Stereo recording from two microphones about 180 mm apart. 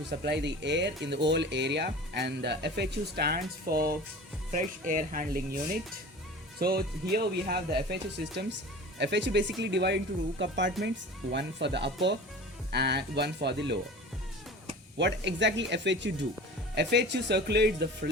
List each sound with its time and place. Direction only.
0.3 s speech: 75° right (ahead or behind)
9.0 s speech: 75° right (ahead or behind)
14.9 s speech: 80° right